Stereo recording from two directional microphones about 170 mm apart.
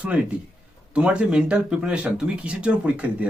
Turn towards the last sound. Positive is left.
turn(degrees=-5)  # may be behind; listen again after turning